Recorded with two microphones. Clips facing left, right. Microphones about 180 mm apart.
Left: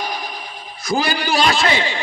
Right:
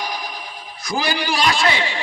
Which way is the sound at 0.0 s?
25° left (ahead or behind).